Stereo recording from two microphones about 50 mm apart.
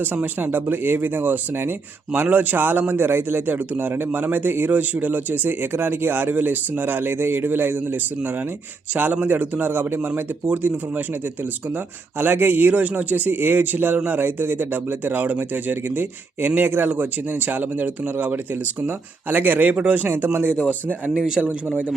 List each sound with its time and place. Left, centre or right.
0.0 s a man's voice: right
12.2 s speech: right
12.7 s a man's voice: right
16.9 s a man's voice: right